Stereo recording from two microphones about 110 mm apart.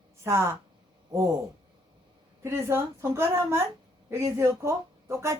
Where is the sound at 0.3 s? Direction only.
25° right (ahead or behind).